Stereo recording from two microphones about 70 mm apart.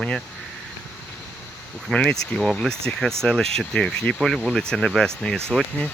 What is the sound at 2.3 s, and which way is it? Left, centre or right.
Speech, centre.